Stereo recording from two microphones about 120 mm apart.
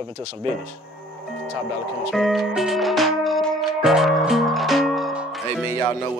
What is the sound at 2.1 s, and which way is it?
Music, centre (ahead or behind).